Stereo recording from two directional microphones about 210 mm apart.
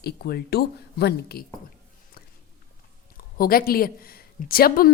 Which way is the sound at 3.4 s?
45° left (ahead or behind).